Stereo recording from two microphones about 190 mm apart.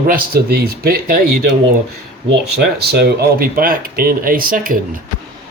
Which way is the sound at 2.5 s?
60° right (ahead or behind).